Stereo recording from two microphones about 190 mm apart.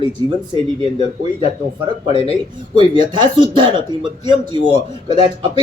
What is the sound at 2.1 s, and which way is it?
Speech, 35° left (ahead or behind).